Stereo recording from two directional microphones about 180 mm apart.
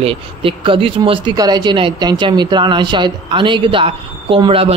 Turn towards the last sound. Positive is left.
turn(degrees=-30)  # may be behind; listen again after turning